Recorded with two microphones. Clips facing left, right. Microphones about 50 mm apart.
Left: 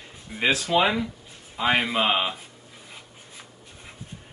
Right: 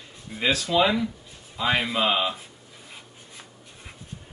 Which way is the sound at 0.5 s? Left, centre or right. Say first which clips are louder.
Even; left.